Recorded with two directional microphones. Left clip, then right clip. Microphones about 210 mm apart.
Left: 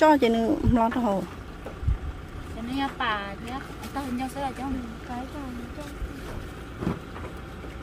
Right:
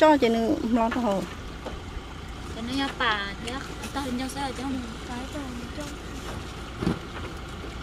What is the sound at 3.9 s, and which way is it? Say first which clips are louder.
Speech: even; 40° left (ahead or behind).